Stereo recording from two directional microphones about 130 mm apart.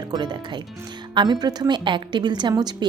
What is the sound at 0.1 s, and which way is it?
Speech, 35° right (ahead or behind).